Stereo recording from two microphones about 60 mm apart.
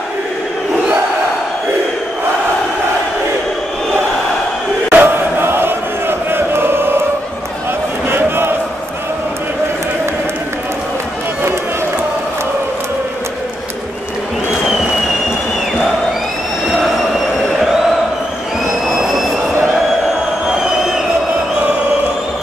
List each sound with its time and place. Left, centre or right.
4.9 s chant: right
8.1 s a sound: right
18.9 s train: centre
20.5 s crowd: centre